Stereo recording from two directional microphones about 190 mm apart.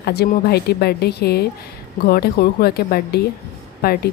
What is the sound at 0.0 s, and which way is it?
A woman's voice, 55° left (ahead or behind).